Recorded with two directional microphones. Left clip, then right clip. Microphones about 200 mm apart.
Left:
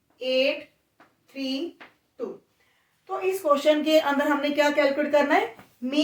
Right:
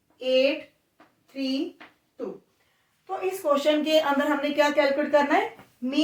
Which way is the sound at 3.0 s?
10° right (ahead or behind).